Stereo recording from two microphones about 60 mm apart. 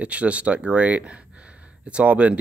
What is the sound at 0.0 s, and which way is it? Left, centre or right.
Speech, right.